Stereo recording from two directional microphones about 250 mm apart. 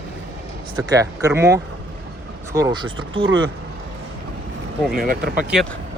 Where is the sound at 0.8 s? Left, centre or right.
Centre.